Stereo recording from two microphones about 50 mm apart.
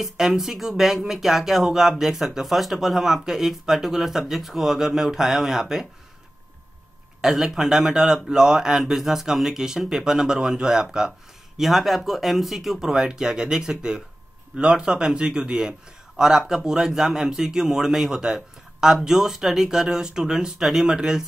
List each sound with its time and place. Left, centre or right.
0.0 s speech: centre
7.2 s speech: centre